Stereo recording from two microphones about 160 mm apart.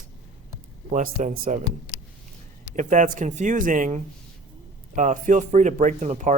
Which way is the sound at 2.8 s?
50° right (ahead or behind).